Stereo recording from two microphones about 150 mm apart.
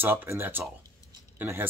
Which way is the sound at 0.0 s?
15° right (ahead or behind).